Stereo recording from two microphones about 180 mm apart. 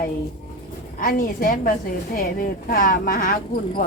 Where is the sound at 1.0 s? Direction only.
50° left (ahead or behind).